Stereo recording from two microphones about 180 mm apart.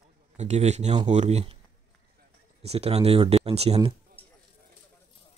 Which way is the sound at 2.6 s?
35° right (ahead or behind).